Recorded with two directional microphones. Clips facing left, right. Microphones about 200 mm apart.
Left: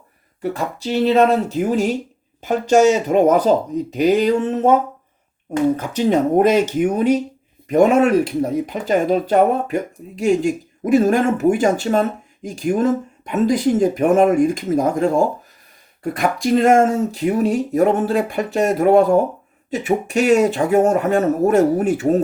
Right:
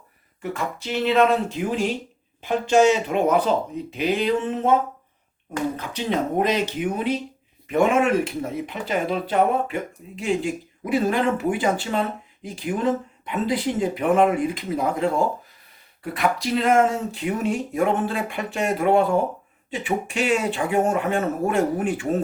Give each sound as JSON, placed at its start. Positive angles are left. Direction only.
{"t": 0.4, "sound": "speech", "side_deg": 35}
{"t": 16.1, "sound": "speech", "side_deg": 45}